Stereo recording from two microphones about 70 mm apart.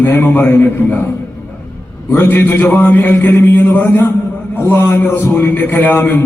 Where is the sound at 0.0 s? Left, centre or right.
Left.